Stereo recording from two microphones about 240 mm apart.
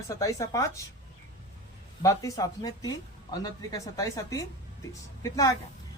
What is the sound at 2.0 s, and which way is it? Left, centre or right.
A man's voice, centre.